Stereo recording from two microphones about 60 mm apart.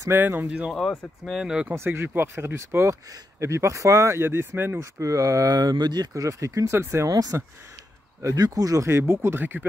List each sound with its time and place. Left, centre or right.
0.1 s speech: right
0.5 s speech: centre
1.7 s speech: right
4.2 s speech: right
4.7 s speech: right
6.7 s speech: right
7.1 s speech: right
8.4 s speech: right
8.8 s speech: right
9.4 s speech: right